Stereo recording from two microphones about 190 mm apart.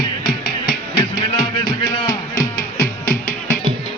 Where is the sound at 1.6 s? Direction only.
20° left (ahead or behind).